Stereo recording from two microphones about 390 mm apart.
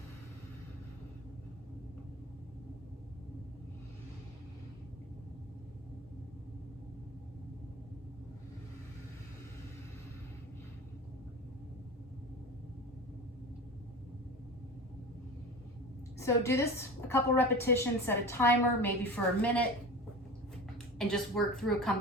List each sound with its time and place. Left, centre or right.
16.1 s a woman's voice: centre
20.7 s a woman's voice: centre